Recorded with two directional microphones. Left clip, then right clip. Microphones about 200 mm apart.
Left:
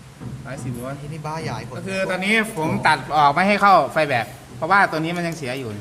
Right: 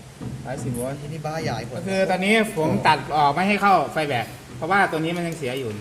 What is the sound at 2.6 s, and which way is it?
Speech, 10° left (ahead or behind).